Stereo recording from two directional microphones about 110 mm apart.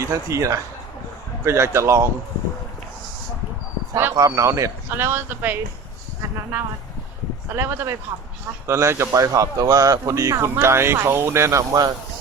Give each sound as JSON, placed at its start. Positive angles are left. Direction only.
{"t": 0.0, "sound": "speech", "side_deg": -25}
{"t": 3.9, "sound": "speech", "side_deg": -25}
{"t": 7.5, "sound": "speech", "side_deg": -20}